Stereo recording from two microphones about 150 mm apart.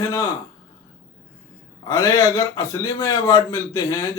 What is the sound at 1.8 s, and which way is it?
A man's voice, 20° left (ahead or behind).